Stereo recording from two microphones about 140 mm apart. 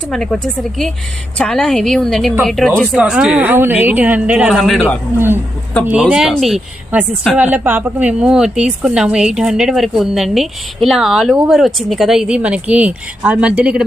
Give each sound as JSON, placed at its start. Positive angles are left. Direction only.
{"t": 0.1, "sound": "a woman's voice", "side_deg": 0}
{"t": 1.4, "sound": "a woman's voice", "side_deg": 5}
{"t": 5.1, "sound": "a woman's voice", "side_deg": -15}
{"t": 5.8, "sound": "a woman's voice", "side_deg": -5}